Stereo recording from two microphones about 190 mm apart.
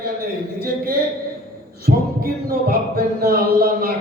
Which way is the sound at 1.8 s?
55° right (ahead or behind).